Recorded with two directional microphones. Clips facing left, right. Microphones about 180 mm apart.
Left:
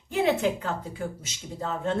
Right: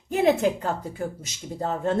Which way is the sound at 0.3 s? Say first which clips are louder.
Right 5 dB; 40° right (ahead or behind).